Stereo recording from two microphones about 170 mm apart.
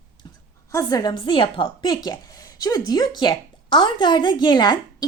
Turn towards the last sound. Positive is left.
turn(degrees=25)  # may be behind; listen again after turning